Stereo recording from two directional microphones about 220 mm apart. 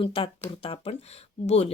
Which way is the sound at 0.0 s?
25° left (ahead or behind).